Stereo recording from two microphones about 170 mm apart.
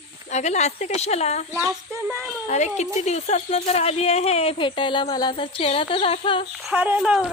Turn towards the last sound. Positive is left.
turn(degrees=-5)  # may be behind; listen again after turning